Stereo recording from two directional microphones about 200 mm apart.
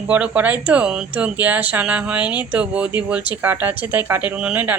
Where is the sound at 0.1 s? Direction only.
5° right (ahead or behind).